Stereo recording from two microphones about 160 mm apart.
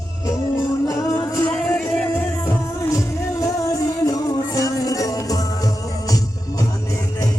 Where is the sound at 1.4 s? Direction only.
5° left (ahead or behind).